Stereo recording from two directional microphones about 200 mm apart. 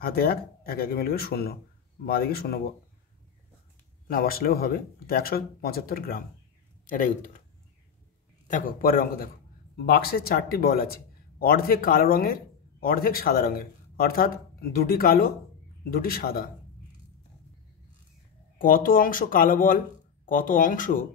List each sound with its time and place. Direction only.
0.0 s a man's voice: 50° left (ahead or behind)
4.1 s a man's voice: 45° left (ahead or behind)
8.5 s a man's voice: 40° left (ahead or behind)
18.6 s a man's voice: 45° left (ahead or behind)